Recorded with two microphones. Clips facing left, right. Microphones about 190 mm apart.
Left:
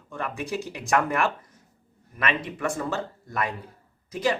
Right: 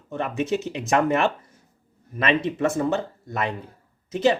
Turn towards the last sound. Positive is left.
turn(degrees=-25)  # may be behind; listen again after turning